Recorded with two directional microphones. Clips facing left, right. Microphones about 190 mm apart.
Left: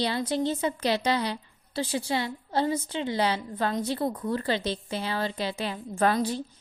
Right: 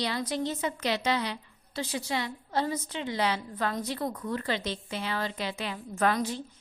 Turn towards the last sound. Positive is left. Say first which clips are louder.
# left 3 dB
turn(degrees=35)  # may be behind; listen again after turning